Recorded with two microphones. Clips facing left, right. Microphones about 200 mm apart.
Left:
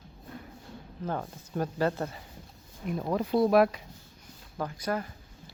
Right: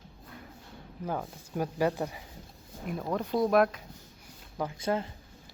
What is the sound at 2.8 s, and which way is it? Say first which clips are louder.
Speech: left 2 dB; centre (ahead or behind).